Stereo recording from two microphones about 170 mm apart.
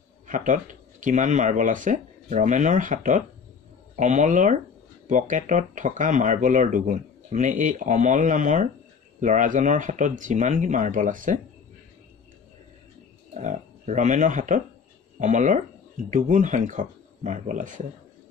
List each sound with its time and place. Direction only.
0.3 s speech: 50° right (ahead or behind)
13.4 s speech: 45° right (ahead or behind)